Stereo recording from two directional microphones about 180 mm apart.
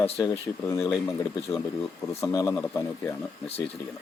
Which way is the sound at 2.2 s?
20° left (ahead or behind).